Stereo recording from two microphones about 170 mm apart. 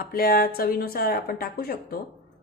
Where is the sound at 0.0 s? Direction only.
60° left (ahead or behind).